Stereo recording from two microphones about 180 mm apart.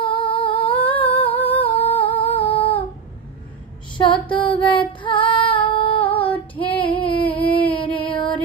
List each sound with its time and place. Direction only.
0.0 s humming: 30° left (ahead or behind)
1.6 s female singing: 30° left (ahead or behind)
4.0 s female singing: 25° left (ahead or behind)